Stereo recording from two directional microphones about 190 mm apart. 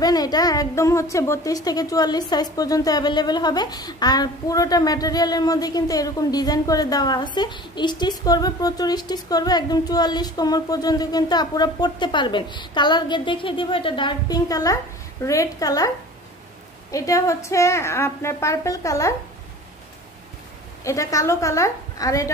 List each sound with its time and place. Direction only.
0.0 s a woman's voice: 20° left (ahead or behind)
16.9 s a woman's voice: 15° left (ahead or behind)
20.8 s a woman's voice: 15° left (ahead or behind)